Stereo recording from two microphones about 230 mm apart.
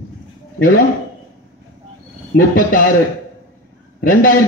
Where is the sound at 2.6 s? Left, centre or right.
Left.